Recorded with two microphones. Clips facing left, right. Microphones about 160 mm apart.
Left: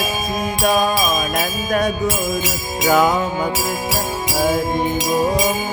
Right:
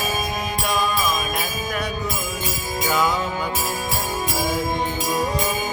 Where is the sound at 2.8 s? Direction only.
50° left (ahead or behind).